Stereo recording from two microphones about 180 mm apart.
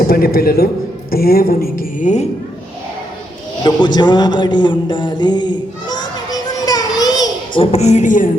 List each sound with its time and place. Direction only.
0.1 s a man's voice: 55° left (ahead or behind)
3.6 s a man's voice: 25° left (ahead or behind); by 8.3 s 45° left (ahead or behind)